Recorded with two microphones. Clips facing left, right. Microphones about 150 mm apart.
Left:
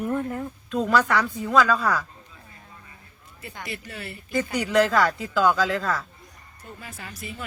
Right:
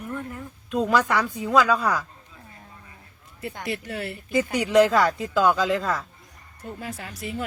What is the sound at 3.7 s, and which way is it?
Speech, 70° right (ahead or behind).